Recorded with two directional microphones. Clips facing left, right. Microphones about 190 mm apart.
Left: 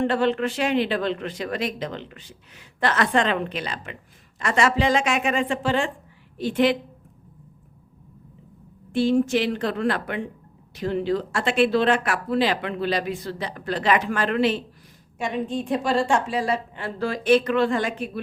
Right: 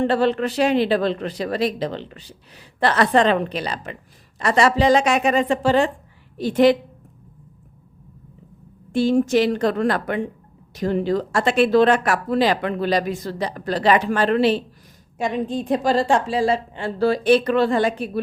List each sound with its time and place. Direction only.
0.0 s a man's voice: 35° right (ahead or behind)
8.9 s a woman's voice: 40° right (ahead or behind)